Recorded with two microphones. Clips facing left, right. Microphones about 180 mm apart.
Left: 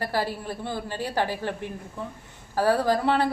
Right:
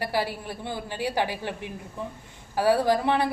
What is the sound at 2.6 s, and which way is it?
Speech, 15° right (ahead or behind).